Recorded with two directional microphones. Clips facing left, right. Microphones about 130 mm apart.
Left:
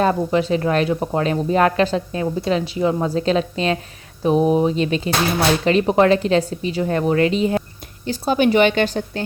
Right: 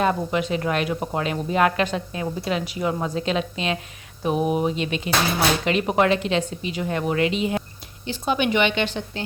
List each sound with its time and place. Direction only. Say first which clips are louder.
0.0 s a woman's voice: left 4 dB; 30° left (ahead or behind)